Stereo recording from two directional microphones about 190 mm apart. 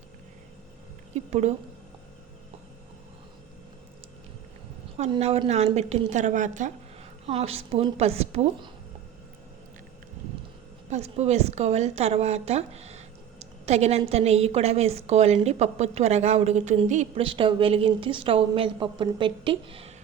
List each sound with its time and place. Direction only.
1.1 s a woman's voice: 35° right (ahead or behind)
4.9 s a woman's voice: 35° right (ahead or behind)
10.8 s a woman's voice: 35° right (ahead or behind)
13.4 s a sound: 35° right (ahead or behind)
14.1 s a woman's voice: 35° right (ahead or behind)